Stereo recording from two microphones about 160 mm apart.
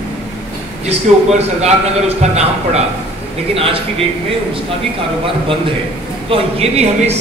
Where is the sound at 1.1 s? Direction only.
45° right (ahead or behind).